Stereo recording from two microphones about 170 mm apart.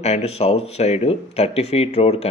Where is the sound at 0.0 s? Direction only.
40° left (ahead or behind).